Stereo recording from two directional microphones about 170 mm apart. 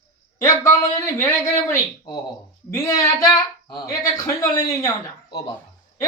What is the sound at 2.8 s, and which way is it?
Speech, 20° left (ahead or behind).